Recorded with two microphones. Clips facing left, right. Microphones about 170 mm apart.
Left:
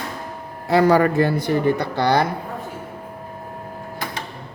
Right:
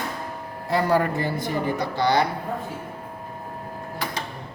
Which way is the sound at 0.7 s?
90° left.